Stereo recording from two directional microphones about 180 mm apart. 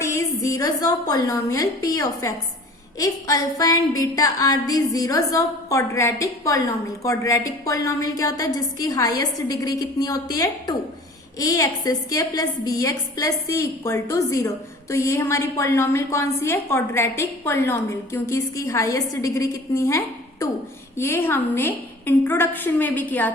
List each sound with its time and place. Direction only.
0.0 s a woman's voice: 15° left (ahead or behind)
3.0 s a sound: 20° left (ahead or behind)
12.8 s a woman's voice: 20° left (ahead or behind)